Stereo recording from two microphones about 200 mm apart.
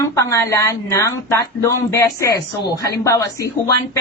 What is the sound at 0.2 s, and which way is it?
A woman's voice, 15° left (ahead or behind).